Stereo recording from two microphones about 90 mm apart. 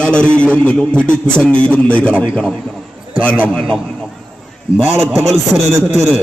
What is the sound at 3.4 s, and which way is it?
Speech, 10° left (ahead or behind).